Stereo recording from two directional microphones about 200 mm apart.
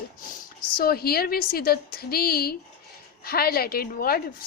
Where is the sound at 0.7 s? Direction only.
50° left (ahead or behind).